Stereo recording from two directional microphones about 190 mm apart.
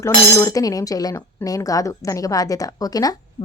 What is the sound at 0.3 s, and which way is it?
Speech, 15° left (ahead or behind).